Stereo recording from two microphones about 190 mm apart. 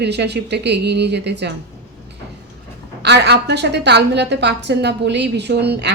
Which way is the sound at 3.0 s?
60° right (ahead or behind).